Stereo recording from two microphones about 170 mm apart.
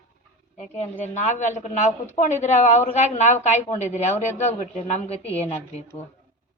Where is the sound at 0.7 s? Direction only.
40° left (ahead or behind).